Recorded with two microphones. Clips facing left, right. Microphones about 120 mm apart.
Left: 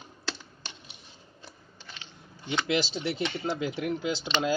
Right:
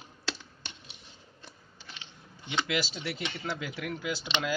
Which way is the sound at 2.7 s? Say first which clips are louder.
Left 4 dB; 25° left (ahead or behind).